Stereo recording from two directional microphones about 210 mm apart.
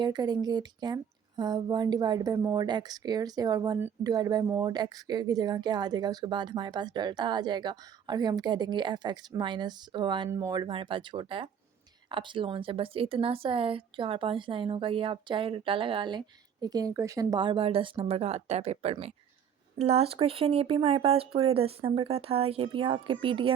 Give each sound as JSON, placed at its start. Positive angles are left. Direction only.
{"t": 0.0, "sound": "speech", "side_deg": -20}